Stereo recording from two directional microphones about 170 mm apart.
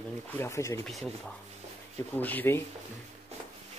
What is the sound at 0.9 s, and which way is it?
Speech, centre (ahead or behind).